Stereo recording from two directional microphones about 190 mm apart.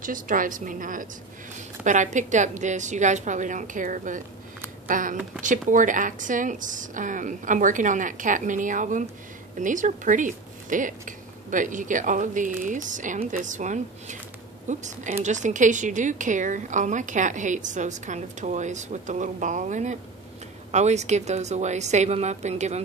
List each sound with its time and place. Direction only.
0.0 s a woman's voice: 45° right (ahead or behind)